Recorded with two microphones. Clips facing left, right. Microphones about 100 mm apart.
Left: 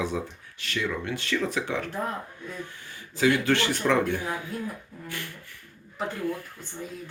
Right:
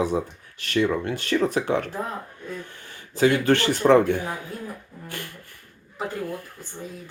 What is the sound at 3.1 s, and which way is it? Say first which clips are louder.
Speech: right 4 dB; 50° right (ahead or behind).